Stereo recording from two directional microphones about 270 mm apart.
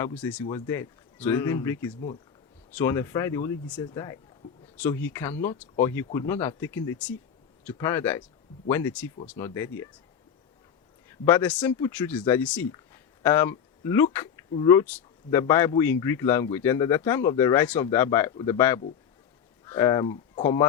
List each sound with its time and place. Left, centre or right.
0.0 s a man's voice: centre
11.3 s a man's voice: centre